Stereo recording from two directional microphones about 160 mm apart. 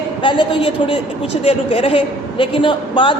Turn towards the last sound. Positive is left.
turn(degrees=30)  # may be behind; listen again after turning